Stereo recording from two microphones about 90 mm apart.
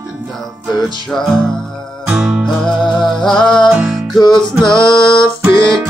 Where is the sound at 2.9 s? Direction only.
5° left (ahead or behind).